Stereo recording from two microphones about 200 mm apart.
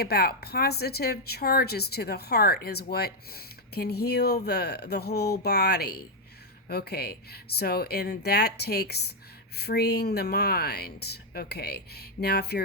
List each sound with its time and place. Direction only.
0.0 s speech: 50° left (ahead or behind)